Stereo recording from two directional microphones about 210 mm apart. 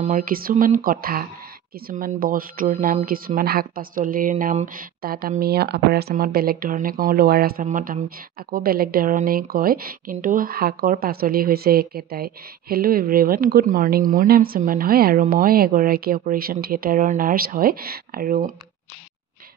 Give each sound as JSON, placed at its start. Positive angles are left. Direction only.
{"t": 0.0, "sound": "a woman's voice", "side_deg": -40}